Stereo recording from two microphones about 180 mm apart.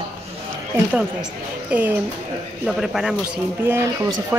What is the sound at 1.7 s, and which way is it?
Speech, 10° right (ahead or behind).